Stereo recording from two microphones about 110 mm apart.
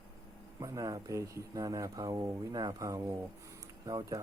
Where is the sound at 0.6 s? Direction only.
30° right (ahead or behind).